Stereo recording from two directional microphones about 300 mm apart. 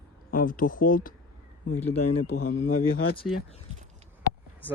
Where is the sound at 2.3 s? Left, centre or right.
Left.